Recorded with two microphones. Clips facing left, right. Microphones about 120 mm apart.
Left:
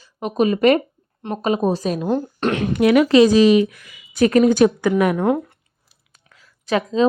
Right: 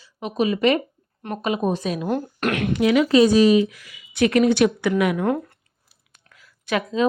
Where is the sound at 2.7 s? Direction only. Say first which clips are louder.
Left 4 dB; 60° left (ahead or behind); by 3.6 s 90° left.